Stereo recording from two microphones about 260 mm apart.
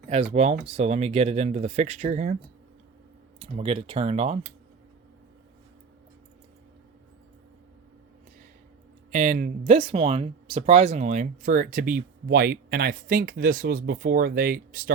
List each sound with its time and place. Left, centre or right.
0.1 s speech: right
3.4 s speech: right
9.1 s speech: right